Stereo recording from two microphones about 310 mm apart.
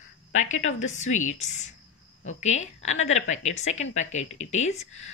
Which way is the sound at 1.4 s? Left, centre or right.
Left.